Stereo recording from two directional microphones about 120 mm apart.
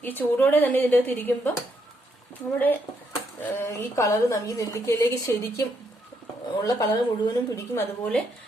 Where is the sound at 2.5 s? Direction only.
15° left (ahead or behind).